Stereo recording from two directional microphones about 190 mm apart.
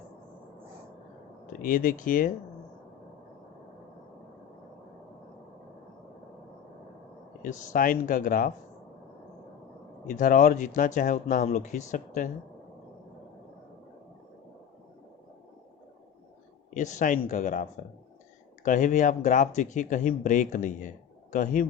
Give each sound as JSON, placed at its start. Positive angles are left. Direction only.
{"t": 1.6, "sound": "speech", "side_deg": 45}
{"t": 7.4, "sound": "speech", "side_deg": 45}
{"t": 10.1, "sound": "speech", "side_deg": 45}
{"t": 16.7, "sound": "speech", "side_deg": 40}